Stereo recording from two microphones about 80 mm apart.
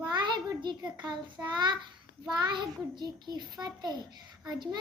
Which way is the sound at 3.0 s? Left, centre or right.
Right.